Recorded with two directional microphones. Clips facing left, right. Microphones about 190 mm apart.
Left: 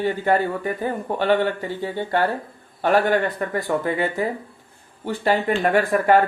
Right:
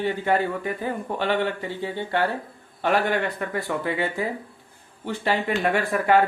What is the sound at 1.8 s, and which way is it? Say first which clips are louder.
Speech: left 3 dB; 45° left (ahead or behind).